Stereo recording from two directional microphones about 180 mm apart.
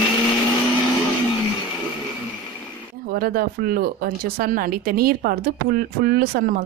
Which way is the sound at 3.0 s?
55° right (ahead or behind).